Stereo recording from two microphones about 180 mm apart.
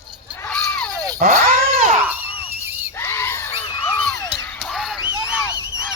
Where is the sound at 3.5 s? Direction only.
30° left (ahead or behind).